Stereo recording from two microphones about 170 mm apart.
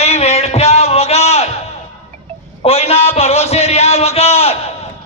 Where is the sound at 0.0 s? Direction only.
35° left (ahead or behind).